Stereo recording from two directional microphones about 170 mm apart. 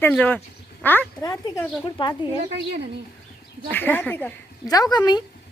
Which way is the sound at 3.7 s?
10° left (ahead or behind).